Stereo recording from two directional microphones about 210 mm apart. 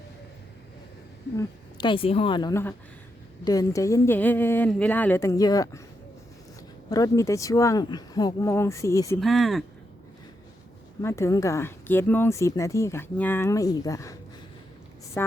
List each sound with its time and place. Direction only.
1.4 s a woman's voice: 20° left (ahead or behind)
6.9 s speech: 15° left (ahead or behind)
9.2 s speech: centre (ahead or behind)
11.0 s speech: 15° left (ahead or behind)